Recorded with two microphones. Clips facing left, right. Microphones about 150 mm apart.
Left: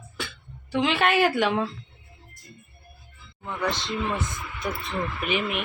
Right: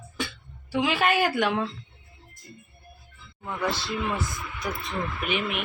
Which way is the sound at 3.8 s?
5° right (ahead or behind).